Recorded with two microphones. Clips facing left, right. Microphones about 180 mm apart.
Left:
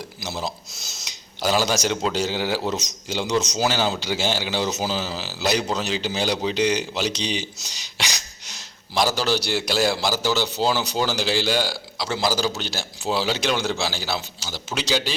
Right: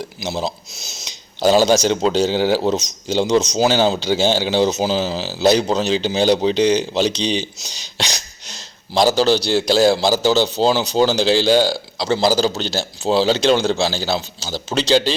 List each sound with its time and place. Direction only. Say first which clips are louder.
0.2 s speech: right 6 dB; 25° right (ahead or behind)
7.9 s a sound: right 5 dB; 30° right (ahead or behind)
9.0 s a man's voice: right 7 dB; 30° right (ahead or behind)